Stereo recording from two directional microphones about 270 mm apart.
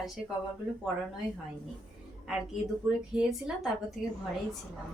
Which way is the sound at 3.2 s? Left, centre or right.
Centre.